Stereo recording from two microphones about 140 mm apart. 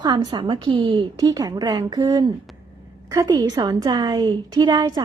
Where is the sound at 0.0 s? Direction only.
30° right (ahead or behind).